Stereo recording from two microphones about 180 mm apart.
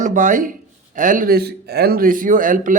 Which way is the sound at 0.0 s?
45° right (ahead or behind).